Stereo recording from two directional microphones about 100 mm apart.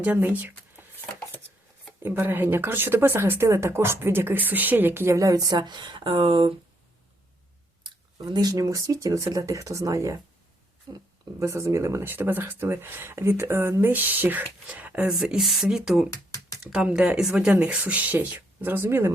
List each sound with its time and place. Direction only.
0.0 s speech: 15° right (ahead or behind)
2.0 s speech: 20° right (ahead or behind); by 6.5 s 55° right (ahead or behind)
8.2 s speech: 40° right (ahead or behind); by 16.0 s 5° right (ahead or behind)
16.0 s a sound: 35° left (ahead or behind)
16.6 s speech: 5° right (ahead or behind); by 19.1 s 25° right (ahead or behind)